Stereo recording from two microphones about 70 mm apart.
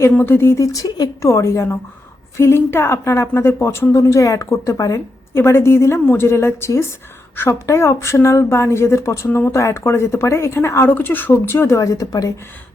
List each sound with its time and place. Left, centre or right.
0.2 s a woman's voice: left
0.7 s speech: left
1.2 s a woman's voice: left
3.9 s a woman's voice: left
5.4 s a woman's voice: left
10.8 s a woman's voice: left